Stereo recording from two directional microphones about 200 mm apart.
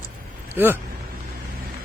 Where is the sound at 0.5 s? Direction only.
10° right (ahead or behind).